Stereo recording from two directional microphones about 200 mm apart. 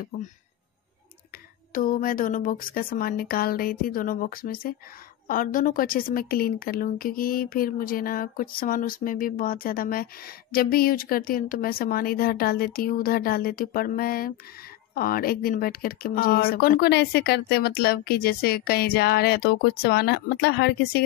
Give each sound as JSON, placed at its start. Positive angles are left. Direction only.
{"t": 1.7, "sound": "a woman's voice", "side_deg": 45}